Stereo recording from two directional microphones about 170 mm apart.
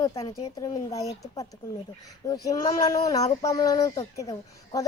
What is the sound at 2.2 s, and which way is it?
A woman's voice, 20° left (ahead or behind).